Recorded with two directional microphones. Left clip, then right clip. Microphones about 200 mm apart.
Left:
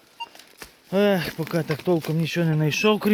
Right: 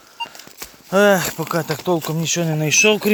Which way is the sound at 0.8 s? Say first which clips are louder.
Right 7 dB; 5° left (ahead or behind).